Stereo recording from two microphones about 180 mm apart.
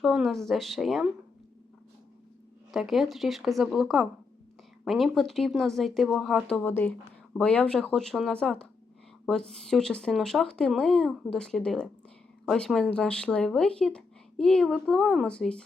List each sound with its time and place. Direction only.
0.0 s speech: centre (ahead or behind)
2.7 s speech: centre (ahead or behind)